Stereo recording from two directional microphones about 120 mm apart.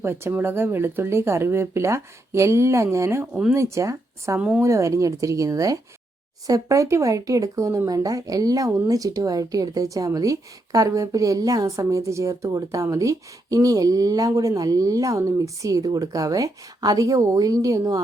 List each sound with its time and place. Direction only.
0.0 s speech: 20° right (ahead or behind)
4.4 s speech: 10° right (ahead or behind)
4.6 s speech: 25° right (ahead or behind)